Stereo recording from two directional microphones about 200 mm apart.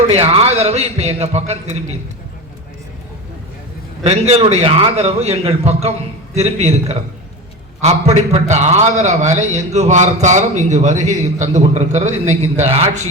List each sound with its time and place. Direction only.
0.1 s a man's voice: 30° right (ahead or behind)
4.0 s a man's voice: 30° right (ahead or behind)